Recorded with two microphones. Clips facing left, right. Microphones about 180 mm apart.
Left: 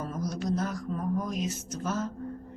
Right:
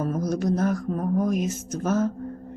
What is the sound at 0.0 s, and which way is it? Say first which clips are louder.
Music: right 8 dB; 50° right (ahead or behind).